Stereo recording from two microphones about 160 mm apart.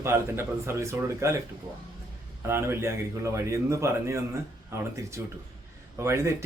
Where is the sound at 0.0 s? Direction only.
15° right (ahead or behind).